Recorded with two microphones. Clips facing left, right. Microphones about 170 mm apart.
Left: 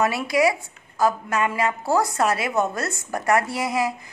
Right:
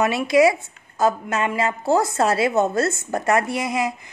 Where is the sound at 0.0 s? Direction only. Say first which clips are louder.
Right 4 dB; 25° right (ahead or behind).